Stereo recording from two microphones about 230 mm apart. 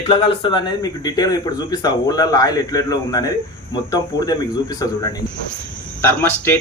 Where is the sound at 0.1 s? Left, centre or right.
Left.